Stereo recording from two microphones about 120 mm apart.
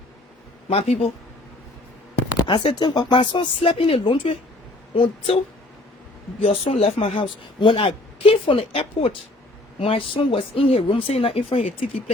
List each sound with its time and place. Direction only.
0.7 s speech: 55° left (ahead or behind)
2.5 s speech: 40° left (ahead or behind)
6.4 s speech: 55° left (ahead or behind)